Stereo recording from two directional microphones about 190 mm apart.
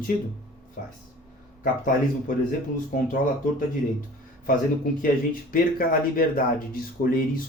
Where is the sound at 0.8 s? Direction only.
50° left (ahead or behind).